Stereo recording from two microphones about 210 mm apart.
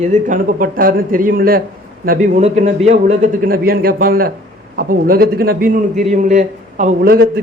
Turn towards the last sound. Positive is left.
turn(degrees=-45)  # may be behind; listen again after turning